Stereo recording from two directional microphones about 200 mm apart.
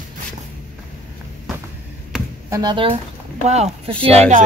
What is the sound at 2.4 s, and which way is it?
Speech, 20° right (ahead or behind).